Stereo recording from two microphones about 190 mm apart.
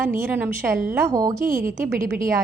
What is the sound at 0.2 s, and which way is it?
A woman's voice, 10° right (ahead or behind).